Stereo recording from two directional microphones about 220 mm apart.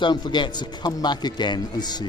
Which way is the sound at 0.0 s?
20° left (ahead or behind).